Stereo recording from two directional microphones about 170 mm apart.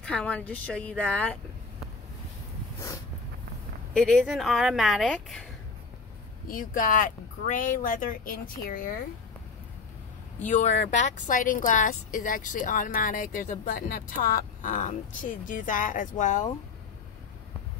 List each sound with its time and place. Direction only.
0.0 s speech: 5° left (ahead or behind)
3.9 s speech: 5° left (ahead or behind)
6.4 s speech: 55° left (ahead or behind)
10.4 s speech: 45° left (ahead or behind)